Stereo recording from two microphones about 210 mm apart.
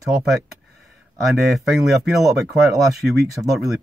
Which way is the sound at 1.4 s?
Centre (ahead or behind).